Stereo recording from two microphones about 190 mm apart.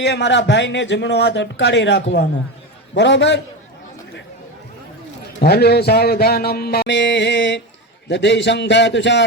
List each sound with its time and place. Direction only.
0.0 s speech: 65° left (ahead or behind)
5.4 s speech: 55° left (ahead or behind)